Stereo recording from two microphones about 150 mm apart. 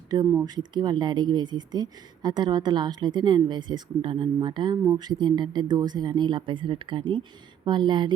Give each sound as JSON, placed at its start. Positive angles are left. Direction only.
{"t": 0.1, "sound": "speech", "side_deg": -25}